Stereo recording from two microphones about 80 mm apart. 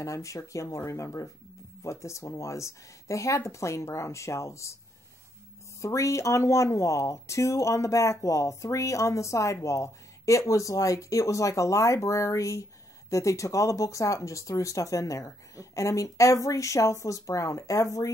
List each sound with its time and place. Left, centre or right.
0.0 s speech: left
5.8 s speech: left